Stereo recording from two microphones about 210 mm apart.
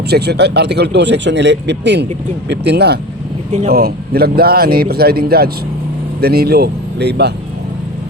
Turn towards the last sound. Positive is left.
turn(degrees=-50)  # may be behind; listen again after turning